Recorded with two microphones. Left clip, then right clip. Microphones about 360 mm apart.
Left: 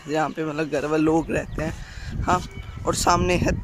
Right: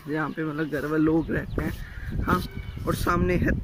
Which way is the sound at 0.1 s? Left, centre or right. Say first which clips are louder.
Left 5 dB; centre.